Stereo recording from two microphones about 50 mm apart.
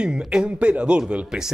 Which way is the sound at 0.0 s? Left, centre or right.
Centre.